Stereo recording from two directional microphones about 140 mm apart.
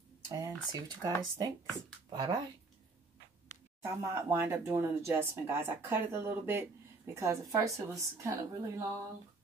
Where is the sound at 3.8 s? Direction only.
20° right (ahead or behind).